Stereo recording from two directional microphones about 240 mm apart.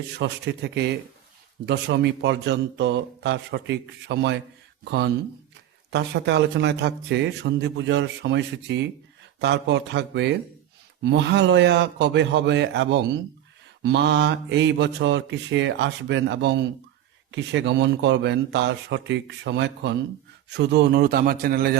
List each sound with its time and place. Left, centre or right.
0.2 s a man's voice: right